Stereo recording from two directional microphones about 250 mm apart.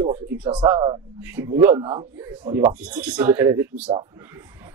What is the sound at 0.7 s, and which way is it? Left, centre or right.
Speech, centre.